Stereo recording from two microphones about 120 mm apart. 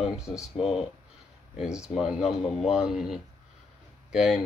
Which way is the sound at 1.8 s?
5° right (ahead or behind).